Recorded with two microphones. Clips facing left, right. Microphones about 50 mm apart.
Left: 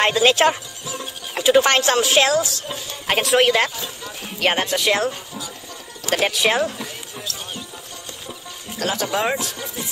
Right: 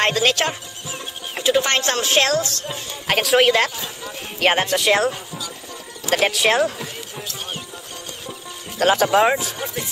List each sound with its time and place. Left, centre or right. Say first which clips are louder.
0.0 s speech: left 2 dB; centre
0.3 s speech: left 5 dB; centre
1.3 s music: left 3 dB; centre
1.6 s speech: left 4 dB; centre
2.7 s speech: right 1 dB; centre
8.7 s speech: right 7 dB; right
9.2 s speech: right 5 dB; centre